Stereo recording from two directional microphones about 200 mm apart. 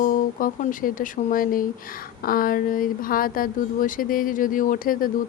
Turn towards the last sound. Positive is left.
turn(degrees=45)  # may be behind; listen again after turning